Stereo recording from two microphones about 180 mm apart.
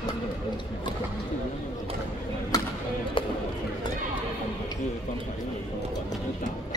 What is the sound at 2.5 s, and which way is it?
Music, 20° left (ahead or behind).